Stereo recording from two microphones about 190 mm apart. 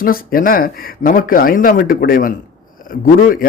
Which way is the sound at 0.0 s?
50° left (ahead or behind).